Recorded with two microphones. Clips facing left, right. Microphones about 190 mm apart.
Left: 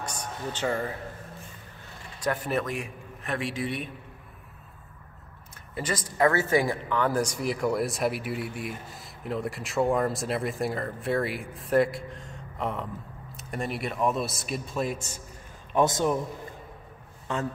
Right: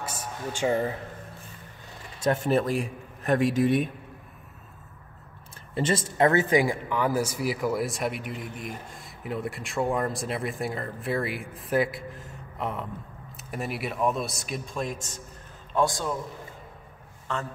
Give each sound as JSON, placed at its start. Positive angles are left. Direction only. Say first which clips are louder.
{"t": 0.0, "sound": "a sound", "louder": "even", "side_deg": -5}
{"t": 2.2, "sound": "a man's voice", "louder": "right 4 dB", "side_deg": -25}
{"t": 5.8, "sound": "speech", "louder": "right 3 dB", "side_deg": -25}
{"t": 15.7, "sound": "a man's voice", "louder": "left 2 dB", "side_deg": 20}